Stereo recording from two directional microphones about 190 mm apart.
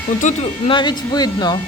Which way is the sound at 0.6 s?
25° left (ahead or behind).